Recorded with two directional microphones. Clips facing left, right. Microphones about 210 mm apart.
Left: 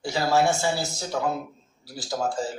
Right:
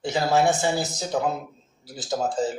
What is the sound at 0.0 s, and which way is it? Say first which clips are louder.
Speech: right 1 dB; 20° right (ahead or behind).